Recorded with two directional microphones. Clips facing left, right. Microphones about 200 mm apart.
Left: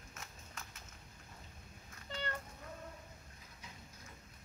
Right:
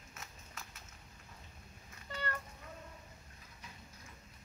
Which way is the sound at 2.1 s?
20° left (ahead or behind).